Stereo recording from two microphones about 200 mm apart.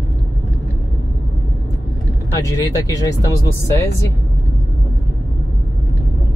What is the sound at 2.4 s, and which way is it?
Speech, 15° left (ahead or behind).